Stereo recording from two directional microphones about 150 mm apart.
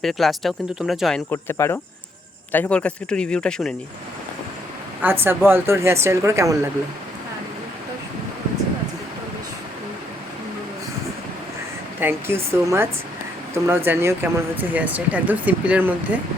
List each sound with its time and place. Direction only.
0.0 s speech: centre (ahead or behind)
1.3 s speech: 15° left (ahead or behind)
5.0 s speech: 15° right (ahead or behind)
11.9 s speech: 15° right (ahead or behind)